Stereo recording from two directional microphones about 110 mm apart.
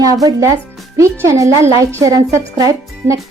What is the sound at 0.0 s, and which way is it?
Speech, 35° right (ahead or behind).